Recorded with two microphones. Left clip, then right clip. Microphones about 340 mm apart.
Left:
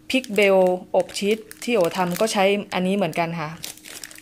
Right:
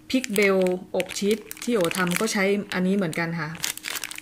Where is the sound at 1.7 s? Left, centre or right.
Centre.